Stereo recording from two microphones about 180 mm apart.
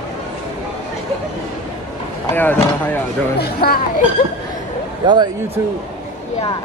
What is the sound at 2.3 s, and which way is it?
Speech, 10° left (ahead or behind).